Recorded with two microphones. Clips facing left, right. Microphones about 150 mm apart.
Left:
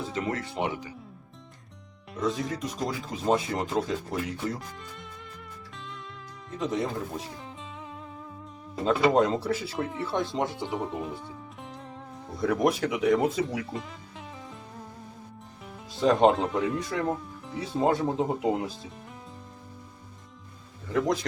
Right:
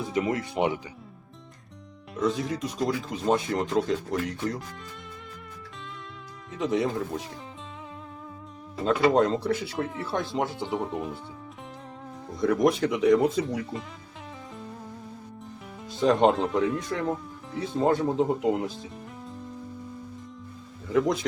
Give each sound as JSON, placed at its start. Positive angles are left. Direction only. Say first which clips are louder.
{"t": 0.3, "sound": "speech", "louder": "right 4 dB", "side_deg": -15}
{"t": 2.1, "sound": "speech", "louder": "right 2 dB", "side_deg": 0}
{"t": 6.6, "sound": "speech", "louder": "right 3 dB", "side_deg": 0}
{"t": 9.1, "sound": "speech", "louder": "right 1 dB", "side_deg": 5}
{"t": 12.4, "sound": "speech", "louder": "right 2 dB", "side_deg": 5}
{"t": 16.0, "sound": "speech", "louder": "even", "side_deg": 0}
{"t": 20.9, "sound": "speech", "louder": "right 2 dB", "side_deg": 0}